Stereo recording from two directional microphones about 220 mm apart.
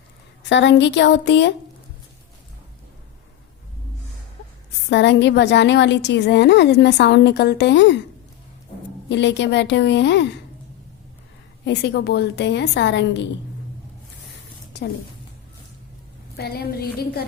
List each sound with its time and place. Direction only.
0.4 s a woman's voice: 55° left (ahead or behind)
4.9 s a woman's voice: 55° left (ahead or behind)
9.0 s a woman's voice: 55° left (ahead or behind)
11.6 s a woman's voice: 50° left (ahead or behind)
16.4 s a woman's voice: 45° left (ahead or behind)